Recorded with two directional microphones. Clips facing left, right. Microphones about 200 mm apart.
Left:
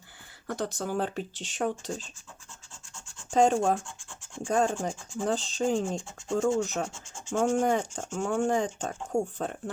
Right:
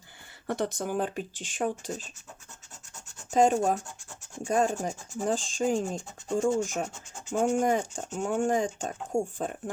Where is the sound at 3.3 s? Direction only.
5° right (ahead or behind).